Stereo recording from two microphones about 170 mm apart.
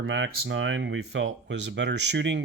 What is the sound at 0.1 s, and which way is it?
Speech, 80° right.